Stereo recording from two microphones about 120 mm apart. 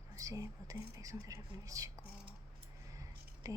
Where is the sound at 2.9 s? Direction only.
30° right (ahead or behind).